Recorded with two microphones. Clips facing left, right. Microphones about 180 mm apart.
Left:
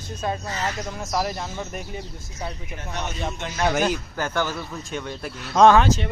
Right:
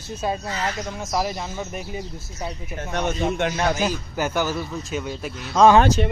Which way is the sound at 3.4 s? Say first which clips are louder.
Right 9 dB; 60° right (ahead or behind).